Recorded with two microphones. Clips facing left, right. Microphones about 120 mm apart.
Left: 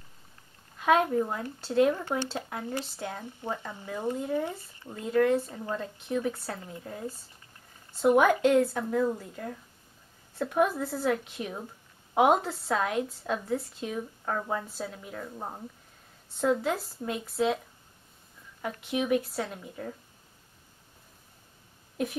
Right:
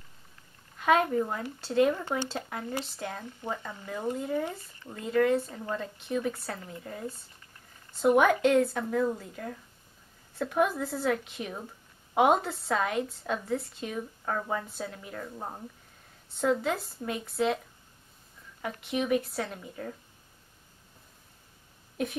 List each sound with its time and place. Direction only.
0.7 s speech: centre (ahead or behind)
5.0 s speech: centre (ahead or behind)